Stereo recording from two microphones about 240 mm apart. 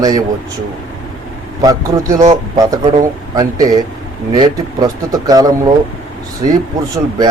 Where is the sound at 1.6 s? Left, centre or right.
Centre.